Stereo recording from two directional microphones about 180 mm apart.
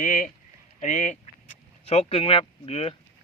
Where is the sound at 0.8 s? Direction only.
40° left (ahead or behind).